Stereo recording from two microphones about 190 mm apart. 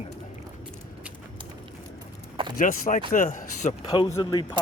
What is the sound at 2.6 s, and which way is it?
Speech, 45° left (ahead or behind).